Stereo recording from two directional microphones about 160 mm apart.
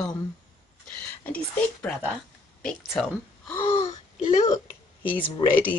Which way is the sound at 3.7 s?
40° left (ahead or behind).